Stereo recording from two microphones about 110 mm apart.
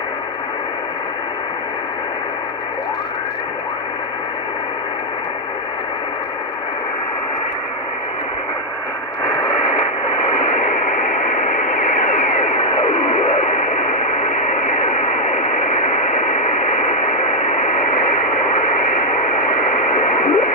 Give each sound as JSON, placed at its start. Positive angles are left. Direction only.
{"t": 9.2, "sound": "radio", "side_deg": 45}